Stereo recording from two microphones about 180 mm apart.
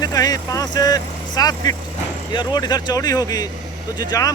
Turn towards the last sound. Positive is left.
turn(degrees=20)  # may be behind; listen again after turning